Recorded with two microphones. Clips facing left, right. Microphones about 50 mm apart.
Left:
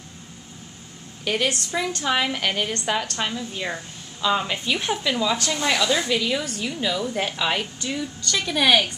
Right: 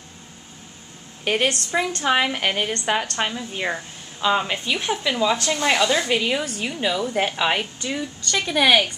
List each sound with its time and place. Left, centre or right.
1.2 s a woman's voice: right